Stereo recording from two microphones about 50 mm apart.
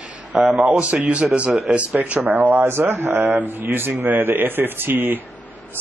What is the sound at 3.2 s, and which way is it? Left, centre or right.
Speech, right.